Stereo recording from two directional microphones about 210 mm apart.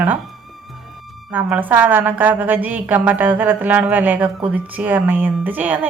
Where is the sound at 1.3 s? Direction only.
10° right (ahead or behind).